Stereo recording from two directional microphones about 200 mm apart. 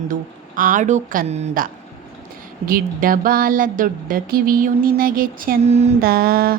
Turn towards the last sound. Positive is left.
turn(degrees=-50)  # may be behind; listen again after turning